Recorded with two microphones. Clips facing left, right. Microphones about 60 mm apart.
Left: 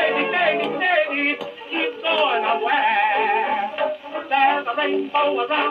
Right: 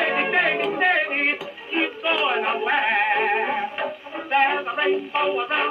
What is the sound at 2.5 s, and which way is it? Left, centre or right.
Music, right.